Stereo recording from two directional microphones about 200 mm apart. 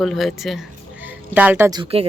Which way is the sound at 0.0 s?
Centre (ahead or behind).